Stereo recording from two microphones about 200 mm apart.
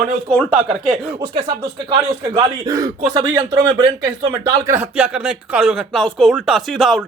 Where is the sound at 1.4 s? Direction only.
20° right (ahead or behind).